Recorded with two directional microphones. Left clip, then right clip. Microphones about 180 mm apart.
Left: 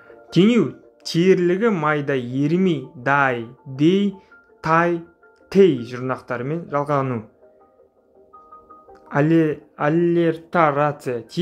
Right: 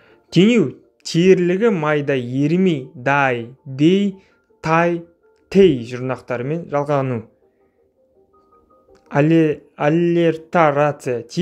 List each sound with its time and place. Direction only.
0.0 s speech: 35° right (ahead or behind)
8.9 s speech: 35° right (ahead or behind)